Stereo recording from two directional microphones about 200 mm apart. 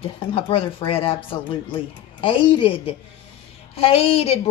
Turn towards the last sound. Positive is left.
turn(degrees=30)  # may be behind; listen again after turning